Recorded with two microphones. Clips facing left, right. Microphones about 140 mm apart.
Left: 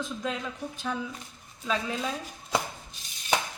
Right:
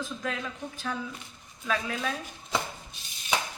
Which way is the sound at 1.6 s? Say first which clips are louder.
Left 1 dB; 20° left (ahead or behind).